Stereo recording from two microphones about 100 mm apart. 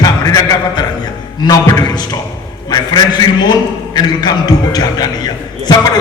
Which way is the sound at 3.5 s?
45° left (ahead or behind).